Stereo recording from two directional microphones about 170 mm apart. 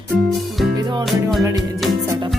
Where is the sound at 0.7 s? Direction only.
25° right (ahead or behind).